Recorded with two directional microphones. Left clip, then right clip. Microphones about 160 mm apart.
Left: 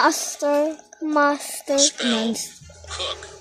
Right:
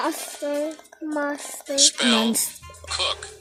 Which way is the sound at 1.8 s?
35° right (ahead or behind).